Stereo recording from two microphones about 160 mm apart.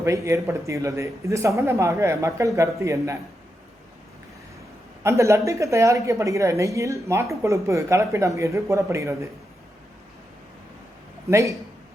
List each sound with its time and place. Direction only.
0.0 s a woman's voice: 20° right (ahead or behind)
5.0 s a woman's voice: 20° right (ahead or behind)
11.3 s a woman's voice: 20° right (ahead or behind)